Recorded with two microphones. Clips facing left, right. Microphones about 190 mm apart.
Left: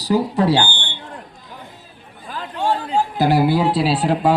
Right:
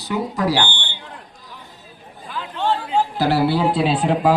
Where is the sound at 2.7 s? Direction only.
40° left (ahead or behind).